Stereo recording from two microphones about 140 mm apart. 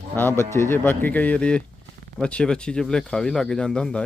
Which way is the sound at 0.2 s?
15° left (ahead or behind).